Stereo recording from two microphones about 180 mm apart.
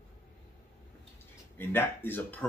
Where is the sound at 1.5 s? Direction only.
10° left (ahead or behind).